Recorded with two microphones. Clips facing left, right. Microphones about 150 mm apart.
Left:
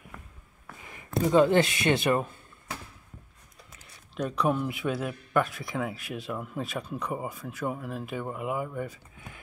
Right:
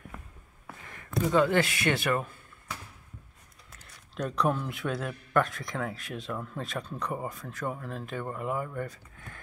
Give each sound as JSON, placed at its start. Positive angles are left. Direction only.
{"t": 1.1, "sound": "speech", "side_deg": 20}
{"t": 3.7, "sound": "a man's voice", "side_deg": 5}